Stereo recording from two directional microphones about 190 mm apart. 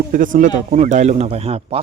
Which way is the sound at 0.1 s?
45° right (ahead or behind).